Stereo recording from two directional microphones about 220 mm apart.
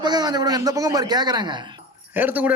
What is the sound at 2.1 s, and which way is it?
Speech, 10° right (ahead or behind).